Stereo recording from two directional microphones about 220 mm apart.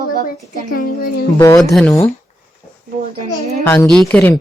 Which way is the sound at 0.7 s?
40° left (ahead or behind).